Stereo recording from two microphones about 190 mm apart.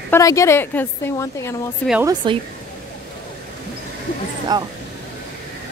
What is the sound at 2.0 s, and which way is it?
Speech, 25° right (ahead or behind).